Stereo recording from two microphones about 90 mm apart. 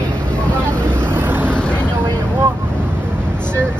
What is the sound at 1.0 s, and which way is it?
Vehicle, 25° right (ahead or behind).